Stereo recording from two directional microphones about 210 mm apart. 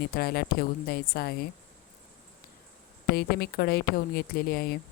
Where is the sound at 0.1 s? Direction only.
50° left (ahead or behind).